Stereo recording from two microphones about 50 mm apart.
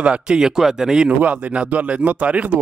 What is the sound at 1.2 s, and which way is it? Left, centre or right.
Speech, right.